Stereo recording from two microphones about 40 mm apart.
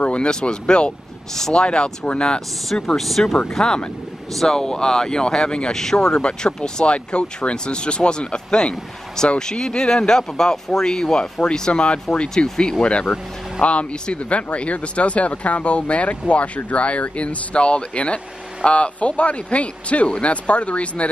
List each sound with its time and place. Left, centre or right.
0.0 s speech: left
1.3 s speech: centre
1.6 s speech: left
3.0 s speech: centre
3.3 s speech: centre
13.6 s speech: left